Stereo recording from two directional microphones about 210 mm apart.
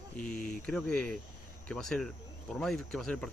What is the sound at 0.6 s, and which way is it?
Speech, 5° left (ahead or behind).